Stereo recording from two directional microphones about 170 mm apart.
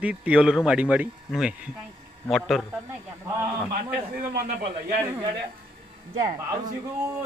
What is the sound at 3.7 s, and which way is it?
Speech, 60° right (ahead or behind).